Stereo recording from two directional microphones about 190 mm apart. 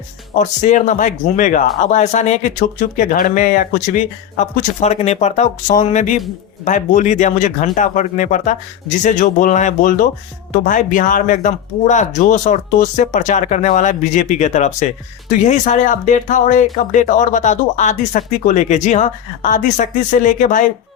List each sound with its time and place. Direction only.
0.3 s speech: 40° left (ahead or behind)